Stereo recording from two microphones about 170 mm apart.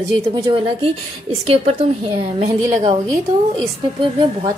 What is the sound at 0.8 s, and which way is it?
A woman's voice, 35° right (ahead or behind).